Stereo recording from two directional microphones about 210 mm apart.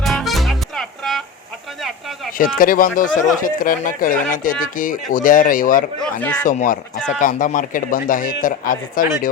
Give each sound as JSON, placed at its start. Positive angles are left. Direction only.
{"t": 0.0, "sound": "music", "side_deg": 0}
{"t": 2.6, "sound": "a man's voice", "side_deg": 40}
{"t": 6.0, "sound": "speech", "side_deg": 10}
{"t": 6.5, "sound": "a man's voice", "side_deg": 40}